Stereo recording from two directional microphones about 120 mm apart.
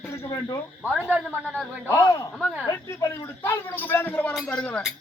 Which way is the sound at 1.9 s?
25° left (ahead or behind).